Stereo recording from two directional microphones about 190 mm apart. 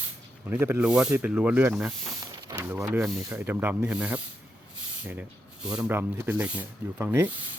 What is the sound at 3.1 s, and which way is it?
Speech, 10° right (ahead or behind).